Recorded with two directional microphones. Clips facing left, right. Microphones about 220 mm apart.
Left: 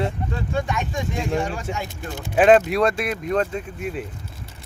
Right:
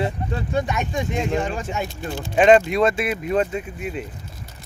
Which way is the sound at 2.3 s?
5° left (ahead or behind).